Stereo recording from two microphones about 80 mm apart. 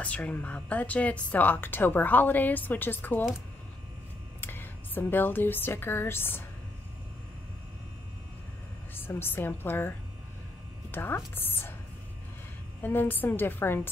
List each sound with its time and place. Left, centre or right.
0.0 s speech: centre
4.4 s speech: left
8.9 s speech: left
12.8 s speech: left